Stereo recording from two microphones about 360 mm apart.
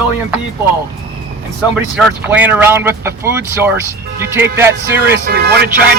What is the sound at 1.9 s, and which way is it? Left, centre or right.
Speech, centre.